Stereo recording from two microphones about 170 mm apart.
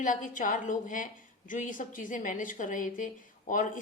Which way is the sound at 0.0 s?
50° left (ahead or behind).